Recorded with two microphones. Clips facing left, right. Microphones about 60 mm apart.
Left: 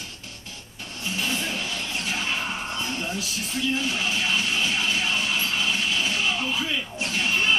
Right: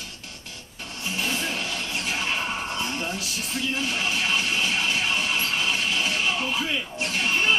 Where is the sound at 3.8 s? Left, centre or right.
Right.